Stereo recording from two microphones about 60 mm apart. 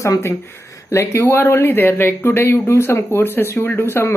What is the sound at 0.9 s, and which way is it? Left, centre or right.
Speech, left.